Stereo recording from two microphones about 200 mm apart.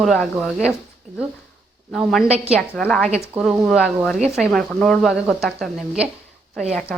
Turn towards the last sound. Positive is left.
turn(degrees=0)  # may be behind; listen again after turning